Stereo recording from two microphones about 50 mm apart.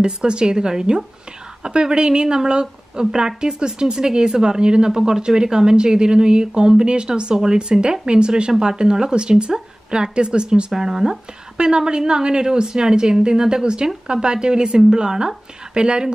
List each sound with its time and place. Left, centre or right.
0.0 s speech: centre